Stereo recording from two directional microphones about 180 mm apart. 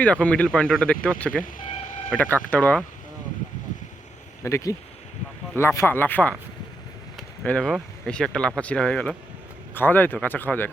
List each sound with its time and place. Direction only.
0.0 s speech: 5° left (ahead or behind)
4.4 s speech: 15° left (ahead or behind)